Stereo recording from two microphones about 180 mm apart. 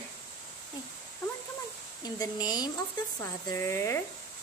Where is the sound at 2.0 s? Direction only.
20° left (ahead or behind).